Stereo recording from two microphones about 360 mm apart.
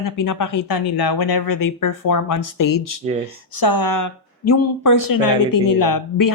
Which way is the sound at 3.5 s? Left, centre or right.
Left.